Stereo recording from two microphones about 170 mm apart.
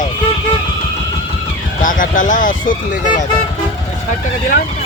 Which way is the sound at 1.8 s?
50° left (ahead or behind).